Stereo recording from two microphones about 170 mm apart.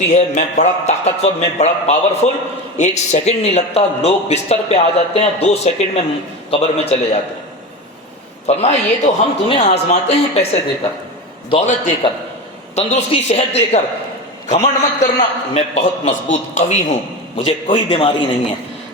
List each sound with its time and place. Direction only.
0.0 s a man's voice: 40° left (ahead or behind)
8.4 s a man's voice: 40° left (ahead or behind)
11.5 s a man's voice: 35° left (ahead or behind)